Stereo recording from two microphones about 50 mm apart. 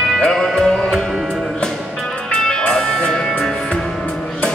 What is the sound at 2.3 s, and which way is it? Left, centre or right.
Music, centre.